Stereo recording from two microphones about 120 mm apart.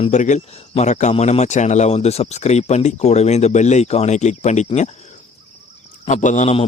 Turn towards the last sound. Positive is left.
turn(degrees=90)